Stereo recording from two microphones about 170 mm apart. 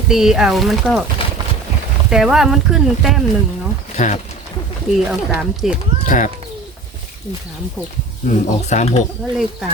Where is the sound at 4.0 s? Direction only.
45° left (ahead or behind).